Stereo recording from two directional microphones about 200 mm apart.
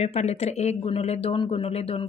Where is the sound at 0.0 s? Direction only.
30° left (ahead or behind).